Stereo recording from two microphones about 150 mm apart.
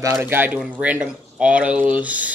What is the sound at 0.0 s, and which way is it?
Speech, 20° right (ahead or behind).